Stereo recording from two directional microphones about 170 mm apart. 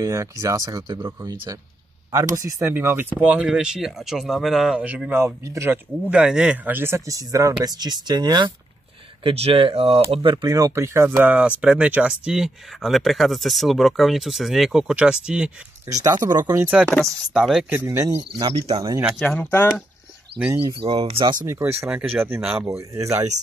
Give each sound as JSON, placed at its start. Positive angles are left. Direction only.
{"t": 0.0, "sound": "speech", "side_deg": -20}
{"t": 15.9, "sound": "speech", "side_deg": -20}
{"t": 16.6, "sound": "speech", "side_deg": -5}
{"t": 17.6, "sound": "speech", "side_deg": -15}
{"t": 18.5, "sound": "speech", "side_deg": -35}
{"t": 19.0, "sound": "speech", "side_deg": 5}
{"t": 20.3, "sound": "speech", "side_deg": -10}
{"t": 20.8, "sound": "speech", "side_deg": -30}
{"t": 21.5, "sound": "speech", "side_deg": -15}